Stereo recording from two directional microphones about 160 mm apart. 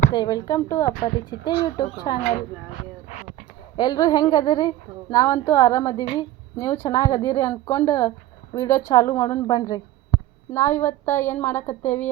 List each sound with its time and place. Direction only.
0.1 s a woman's voice: 25° left (ahead or behind)
1.5 s a woman's voice: 30° left (ahead or behind)
3.8 s a woman's voice: 25° left (ahead or behind)